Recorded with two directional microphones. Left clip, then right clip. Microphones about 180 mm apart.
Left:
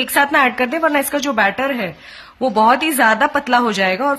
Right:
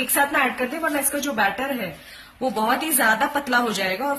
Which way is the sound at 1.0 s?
45° left (ahead or behind).